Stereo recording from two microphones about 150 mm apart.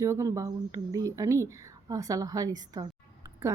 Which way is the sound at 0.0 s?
20° right (ahead or behind).